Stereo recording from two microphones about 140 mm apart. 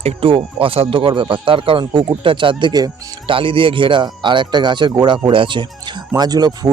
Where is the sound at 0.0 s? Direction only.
40° right (ahead or behind).